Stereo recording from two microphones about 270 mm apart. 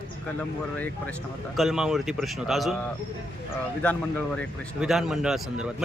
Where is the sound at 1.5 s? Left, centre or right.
Centre.